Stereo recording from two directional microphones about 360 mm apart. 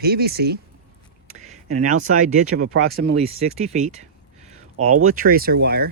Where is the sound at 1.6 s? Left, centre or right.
Right.